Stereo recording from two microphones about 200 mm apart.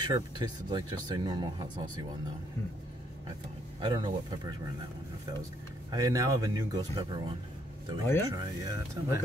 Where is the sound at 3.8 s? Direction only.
20° right (ahead or behind).